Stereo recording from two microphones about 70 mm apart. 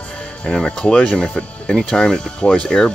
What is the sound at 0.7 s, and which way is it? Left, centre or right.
Speech, centre.